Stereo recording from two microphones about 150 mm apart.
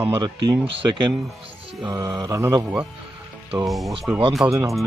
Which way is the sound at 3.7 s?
Centre (ahead or behind).